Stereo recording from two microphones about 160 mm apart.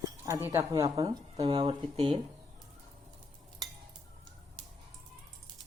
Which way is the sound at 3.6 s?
25° right (ahead or behind).